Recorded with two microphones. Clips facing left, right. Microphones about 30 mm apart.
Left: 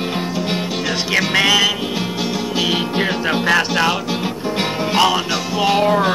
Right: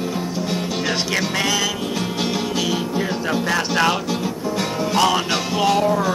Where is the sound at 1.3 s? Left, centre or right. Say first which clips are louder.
Left 9 dB; left.